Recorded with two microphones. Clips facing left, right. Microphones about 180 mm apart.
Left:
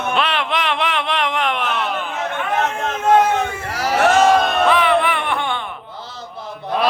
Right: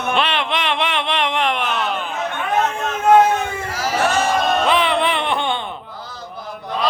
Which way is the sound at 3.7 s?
65° left (ahead or behind).